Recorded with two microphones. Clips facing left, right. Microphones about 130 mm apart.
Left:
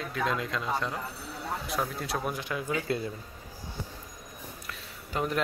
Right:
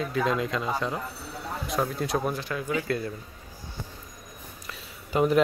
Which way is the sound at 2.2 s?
15° left (ahead or behind).